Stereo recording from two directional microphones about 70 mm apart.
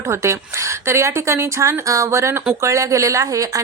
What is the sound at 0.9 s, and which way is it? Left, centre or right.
Speech, right.